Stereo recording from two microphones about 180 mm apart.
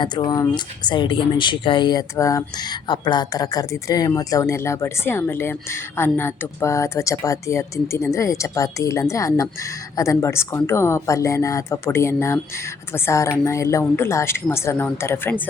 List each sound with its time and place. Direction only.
0.0 s speech: 20° left (ahead or behind)